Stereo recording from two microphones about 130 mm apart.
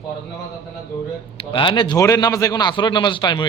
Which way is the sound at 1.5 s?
40° left (ahead or behind).